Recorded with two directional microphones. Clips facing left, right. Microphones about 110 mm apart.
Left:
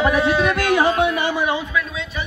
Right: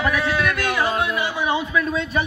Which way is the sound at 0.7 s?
60° left (ahead or behind).